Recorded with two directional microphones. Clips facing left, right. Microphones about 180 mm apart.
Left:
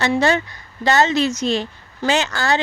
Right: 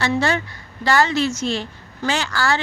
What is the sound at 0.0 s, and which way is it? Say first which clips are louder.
A woman's voice: left 3 dB; 20° left (ahead or behind).